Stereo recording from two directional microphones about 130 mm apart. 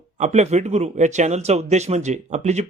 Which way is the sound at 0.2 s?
60° right (ahead or behind).